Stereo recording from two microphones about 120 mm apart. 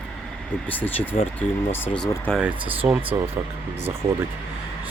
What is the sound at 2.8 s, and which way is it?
Speech, 10° right (ahead or behind).